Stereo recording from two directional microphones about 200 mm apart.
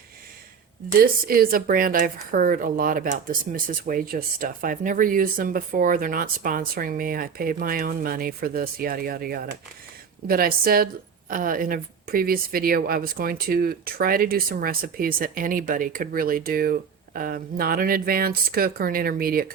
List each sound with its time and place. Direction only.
0.9 s a woman's voice: 45° right (ahead or behind)